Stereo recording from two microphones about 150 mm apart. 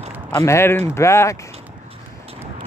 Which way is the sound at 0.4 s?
20° left (ahead or behind).